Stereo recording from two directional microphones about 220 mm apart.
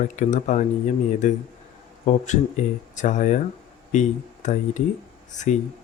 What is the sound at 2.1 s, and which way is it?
Speech, 35° left (ahead or behind).